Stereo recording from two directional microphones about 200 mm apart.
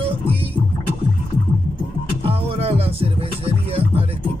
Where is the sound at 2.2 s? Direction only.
30° right (ahead or behind).